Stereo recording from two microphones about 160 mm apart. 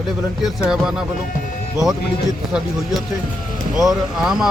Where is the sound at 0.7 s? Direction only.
5° right (ahead or behind).